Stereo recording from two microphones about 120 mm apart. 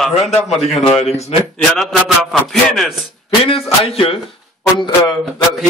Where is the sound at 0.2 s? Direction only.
65° left (ahead or behind).